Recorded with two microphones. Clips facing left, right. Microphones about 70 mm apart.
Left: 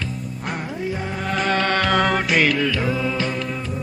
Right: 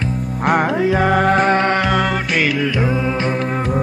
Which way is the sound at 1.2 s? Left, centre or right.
Right.